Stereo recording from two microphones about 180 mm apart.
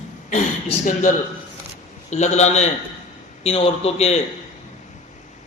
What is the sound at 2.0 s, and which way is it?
A man's voice, 40° left (ahead or behind).